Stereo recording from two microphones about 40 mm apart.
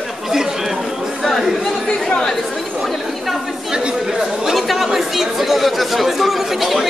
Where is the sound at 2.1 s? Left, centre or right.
Centre.